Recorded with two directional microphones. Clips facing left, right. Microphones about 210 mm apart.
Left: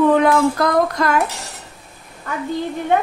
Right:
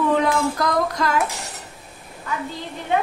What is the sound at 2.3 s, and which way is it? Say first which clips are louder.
Speech: left 6 dB; 50° left (ahead or behind).